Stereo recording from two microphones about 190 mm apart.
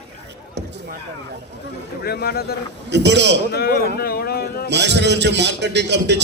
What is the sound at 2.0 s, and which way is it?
Speech, 55° left (ahead or behind).